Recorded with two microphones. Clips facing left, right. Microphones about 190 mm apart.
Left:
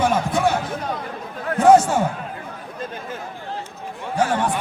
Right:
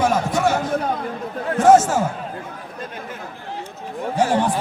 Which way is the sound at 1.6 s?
5° right (ahead or behind).